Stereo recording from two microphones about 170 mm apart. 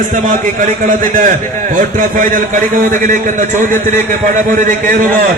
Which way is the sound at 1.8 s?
50° right (ahead or behind).